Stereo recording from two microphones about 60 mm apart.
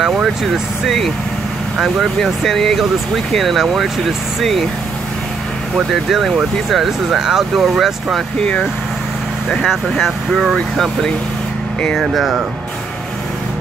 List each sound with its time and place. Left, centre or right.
0.0 s speech: centre
2.2 s speech: centre
6.0 s speech: centre
8.4 s speech: centre
9.8 s speech: centre
12.0 s speech: centre